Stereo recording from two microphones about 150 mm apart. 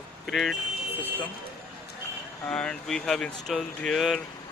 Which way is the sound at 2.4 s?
5° left (ahead or behind).